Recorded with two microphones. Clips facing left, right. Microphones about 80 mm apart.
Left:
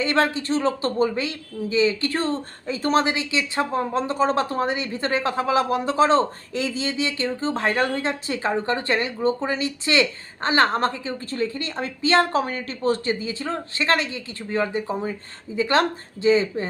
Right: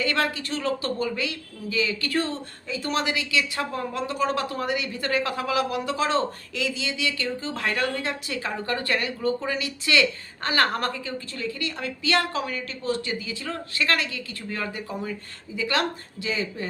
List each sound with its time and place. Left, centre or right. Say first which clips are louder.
0.0 s speech: left 4 dB; left